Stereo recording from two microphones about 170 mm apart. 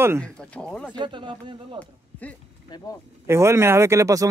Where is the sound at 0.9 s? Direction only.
30° right (ahead or behind).